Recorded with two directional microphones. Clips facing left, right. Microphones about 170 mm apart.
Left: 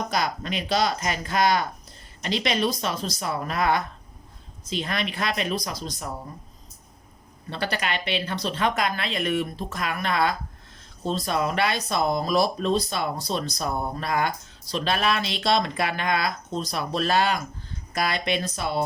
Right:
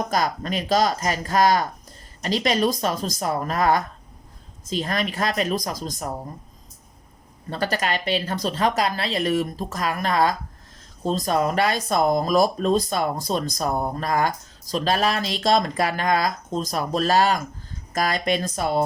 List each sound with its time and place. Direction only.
0.1 s speech: 40° right (ahead or behind)
7.5 s speech: 40° right (ahead or behind)